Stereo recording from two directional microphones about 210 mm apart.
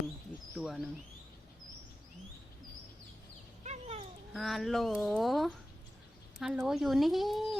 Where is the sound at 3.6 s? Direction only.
30° right (ahead or behind).